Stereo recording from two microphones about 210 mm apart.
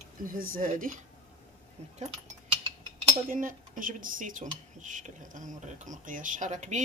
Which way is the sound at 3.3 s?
40° right (ahead or behind).